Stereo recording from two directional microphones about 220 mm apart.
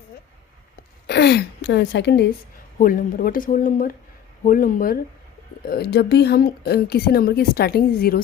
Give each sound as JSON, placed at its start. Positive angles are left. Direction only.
{"t": 1.0, "sound": "a woman's voice", "side_deg": 50}
{"t": 2.7, "sound": "a woman's voice", "side_deg": 40}